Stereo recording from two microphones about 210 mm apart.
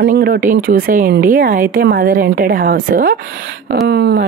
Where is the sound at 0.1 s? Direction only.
40° right (ahead or behind).